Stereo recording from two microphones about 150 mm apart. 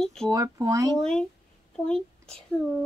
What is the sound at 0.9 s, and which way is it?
A child's voice, 5° left (ahead or behind).